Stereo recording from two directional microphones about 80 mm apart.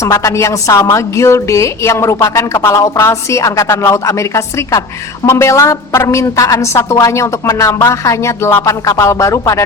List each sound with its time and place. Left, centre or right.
0.0 s a woman's voice: left